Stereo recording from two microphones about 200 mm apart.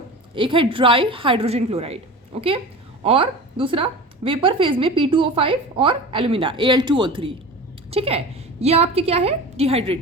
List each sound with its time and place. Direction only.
0.3 s a woman's voice: 25° right (ahead or behind)